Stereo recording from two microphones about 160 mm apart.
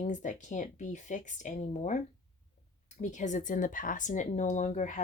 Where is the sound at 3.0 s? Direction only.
50° left (ahead or behind).